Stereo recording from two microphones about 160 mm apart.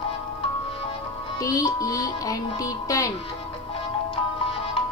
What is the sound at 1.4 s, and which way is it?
Music, 20° left (ahead or behind).